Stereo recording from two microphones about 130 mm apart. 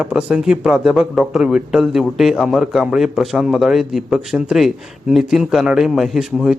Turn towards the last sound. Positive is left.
turn(degrees=0)  # may be behind; listen again after turning